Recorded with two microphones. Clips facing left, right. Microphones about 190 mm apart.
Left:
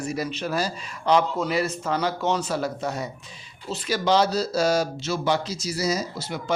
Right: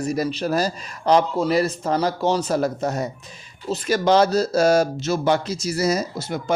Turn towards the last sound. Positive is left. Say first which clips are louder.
# right 4 dB
turn(degrees=-50)  # may be behind; listen again after turning